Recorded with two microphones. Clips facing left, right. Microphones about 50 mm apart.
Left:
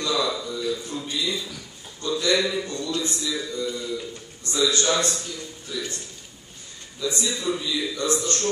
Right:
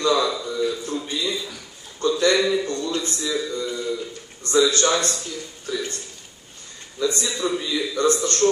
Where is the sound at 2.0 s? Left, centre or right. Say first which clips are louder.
Right 4 dB; right.